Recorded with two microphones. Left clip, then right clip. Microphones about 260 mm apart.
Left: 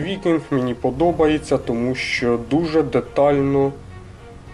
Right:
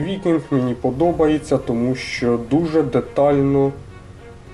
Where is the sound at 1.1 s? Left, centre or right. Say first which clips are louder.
Even; centre.